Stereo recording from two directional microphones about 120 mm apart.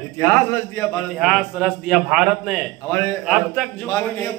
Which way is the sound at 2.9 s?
25° left (ahead or behind).